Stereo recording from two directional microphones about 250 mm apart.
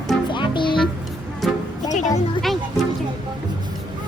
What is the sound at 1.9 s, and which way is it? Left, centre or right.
Music, left.